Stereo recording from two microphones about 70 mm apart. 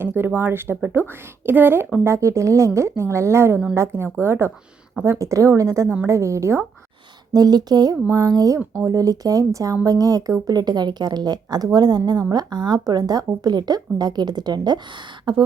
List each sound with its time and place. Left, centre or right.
0.0 s speech: right
2.0 s a woman's voice: right
7.3 s speech: right
8.1 s speech: right
10.4 s speech: right
12.3 s speech: right